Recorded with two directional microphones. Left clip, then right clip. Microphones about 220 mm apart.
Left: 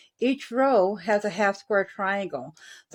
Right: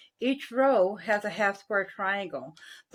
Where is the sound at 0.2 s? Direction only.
45° left (ahead or behind).